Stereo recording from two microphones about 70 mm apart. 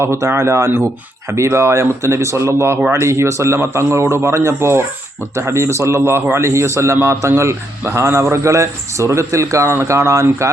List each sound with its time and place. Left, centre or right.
0.0 s a man's voice: right